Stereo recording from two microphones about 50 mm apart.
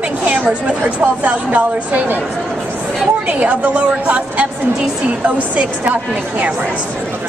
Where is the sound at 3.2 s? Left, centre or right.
Right.